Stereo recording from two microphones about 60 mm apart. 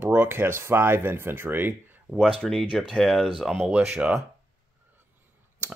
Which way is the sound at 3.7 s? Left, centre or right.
Centre.